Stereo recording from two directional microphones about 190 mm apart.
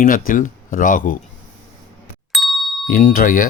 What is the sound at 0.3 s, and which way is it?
Speech, 45° left (ahead or behind).